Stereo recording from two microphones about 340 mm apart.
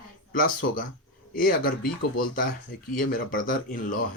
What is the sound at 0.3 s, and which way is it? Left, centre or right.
Speech, left.